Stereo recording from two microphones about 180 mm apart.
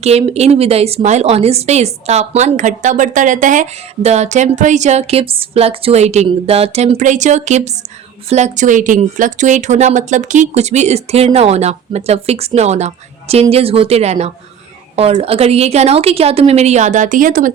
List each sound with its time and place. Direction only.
0.0 s a woman's voice: 35° right (ahead or behind)